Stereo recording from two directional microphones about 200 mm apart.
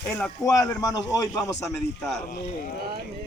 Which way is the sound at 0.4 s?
15° left (ahead or behind).